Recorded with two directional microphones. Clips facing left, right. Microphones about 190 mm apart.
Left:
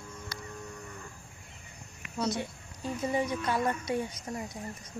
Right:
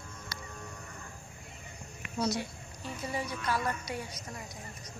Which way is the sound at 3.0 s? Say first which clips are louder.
Left 5 dB; 20° left (ahead or behind).